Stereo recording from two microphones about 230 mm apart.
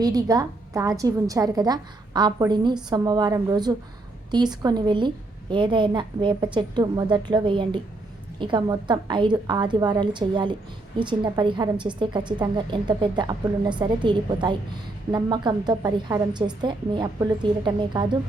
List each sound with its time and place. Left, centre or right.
0.0 s a woman's voice: centre